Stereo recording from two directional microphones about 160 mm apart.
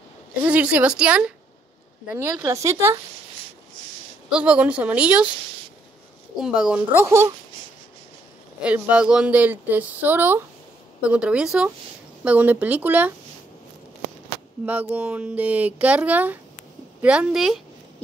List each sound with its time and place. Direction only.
0.4 s speech: 10° right (ahead or behind)
4.3 s speech: 5° right (ahead or behind)
6.3 s speech: 5° right (ahead or behind)
8.6 s speech: 10° right (ahead or behind)
14.7 s speech: 10° right (ahead or behind)